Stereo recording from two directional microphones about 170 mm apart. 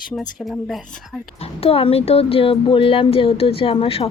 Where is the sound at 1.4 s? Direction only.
35° left (ahead or behind).